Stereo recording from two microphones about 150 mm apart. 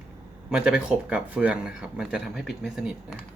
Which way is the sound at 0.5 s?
5° right (ahead or behind).